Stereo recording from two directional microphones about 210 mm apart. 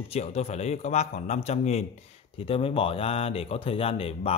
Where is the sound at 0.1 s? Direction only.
30° left (ahead or behind).